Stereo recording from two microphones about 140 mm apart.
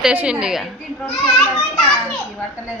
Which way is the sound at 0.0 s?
10° right (ahead or behind).